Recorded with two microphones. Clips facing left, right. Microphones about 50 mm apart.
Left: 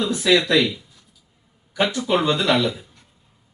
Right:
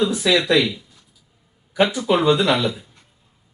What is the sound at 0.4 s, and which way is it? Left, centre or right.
Speech, centre.